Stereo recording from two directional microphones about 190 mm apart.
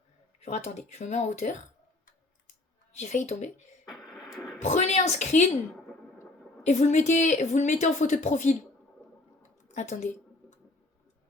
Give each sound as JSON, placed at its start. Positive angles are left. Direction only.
{"t": 0.3, "sound": "a woman's voice", "side_deg": 35}
{"t": 3.0, "sound": "a woman's voice", "side_deg": 35}
{"t": 3.8, "sound": "radio", "side_deg": 0}
{"t": 4.6, "sound": "a woman's voice", "side_deg": 35}
{"t": 6.6, "sound": "a woman's voice", "side_deg": 35}